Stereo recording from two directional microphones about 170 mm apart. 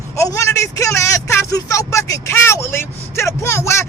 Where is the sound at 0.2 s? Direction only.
20° left (ahead or behind).